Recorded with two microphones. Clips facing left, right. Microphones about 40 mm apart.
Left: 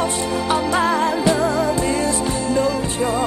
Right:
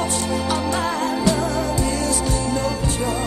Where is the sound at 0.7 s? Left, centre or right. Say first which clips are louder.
Left 5 dB; centre.